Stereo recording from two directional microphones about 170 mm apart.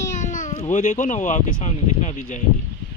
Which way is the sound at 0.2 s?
45° left (ahead or behind).